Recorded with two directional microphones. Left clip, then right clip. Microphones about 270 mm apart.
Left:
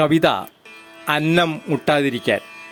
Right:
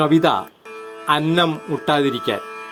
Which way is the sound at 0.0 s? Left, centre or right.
Left.